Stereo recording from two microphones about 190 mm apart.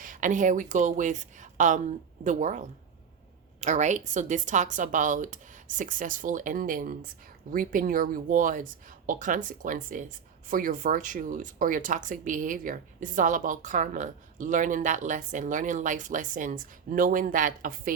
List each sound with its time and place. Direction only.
0.0 s a woman's voice: 45° right (ahead or behind)